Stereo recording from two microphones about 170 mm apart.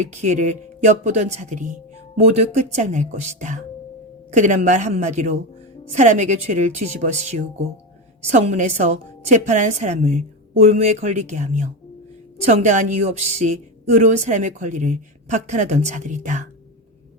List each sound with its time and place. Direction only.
0.0 s a woman's voice: 45° right (ahead or behind)